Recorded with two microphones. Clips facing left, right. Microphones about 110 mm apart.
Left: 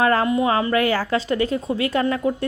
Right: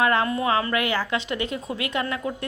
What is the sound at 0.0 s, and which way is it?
Speech, 35° left (ahead or behind).